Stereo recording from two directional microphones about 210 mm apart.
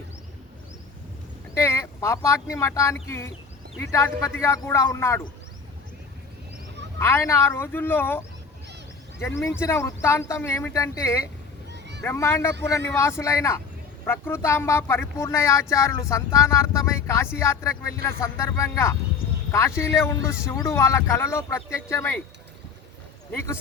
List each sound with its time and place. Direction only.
1.5 s speech: 10° left (ahead or behind)
7.0 s speech: 15° left (ahead or behind)
11.7 s a sound: 55° right (ahead or behind)
12.0 s speech: 10° left (ahead or behind)